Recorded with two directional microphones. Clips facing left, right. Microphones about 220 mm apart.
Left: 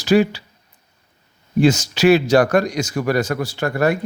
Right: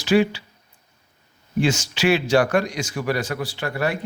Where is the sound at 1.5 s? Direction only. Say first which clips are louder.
Left 6 dB; 40° left (ahead or behind).